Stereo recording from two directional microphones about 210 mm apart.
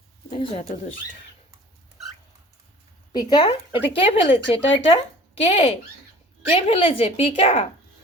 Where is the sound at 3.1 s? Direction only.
20° left (ahead or behind).